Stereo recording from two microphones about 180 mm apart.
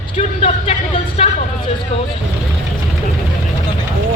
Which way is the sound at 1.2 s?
35° left (ahead or behind).